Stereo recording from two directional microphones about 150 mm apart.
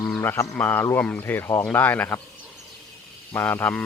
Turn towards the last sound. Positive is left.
turn(degrees=10)  # may be behind; listen again after turning